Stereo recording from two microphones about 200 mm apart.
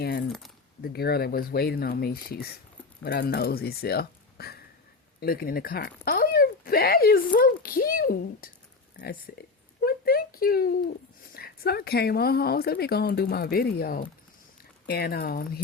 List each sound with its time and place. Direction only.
0.0 s keys jangling: 50° left (ahead or behind)
0.8 s speech: 50° left (ahead or behind)
9.8 s a sound: 50° left (ahead or behind)
11.3 s speech: 50° left (ahead or behind)